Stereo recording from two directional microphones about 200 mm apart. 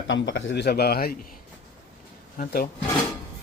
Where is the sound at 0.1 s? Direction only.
65° left (ahead or behind); by 1.1 s 50° left (ahead or behind).